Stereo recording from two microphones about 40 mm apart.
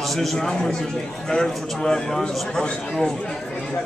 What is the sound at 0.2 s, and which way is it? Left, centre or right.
A man's voice, centre.